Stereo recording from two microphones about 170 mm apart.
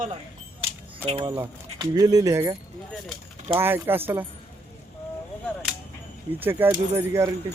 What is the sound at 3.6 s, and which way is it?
Speech, 15° right (ahead or behind).